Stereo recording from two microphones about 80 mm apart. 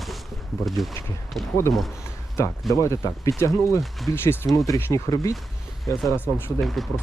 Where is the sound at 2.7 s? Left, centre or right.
Left.